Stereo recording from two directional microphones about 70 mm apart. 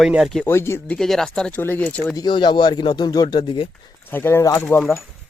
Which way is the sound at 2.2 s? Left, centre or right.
Left.